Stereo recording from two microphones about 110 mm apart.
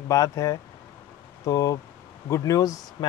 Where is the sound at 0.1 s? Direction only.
30° left (ahead or behind).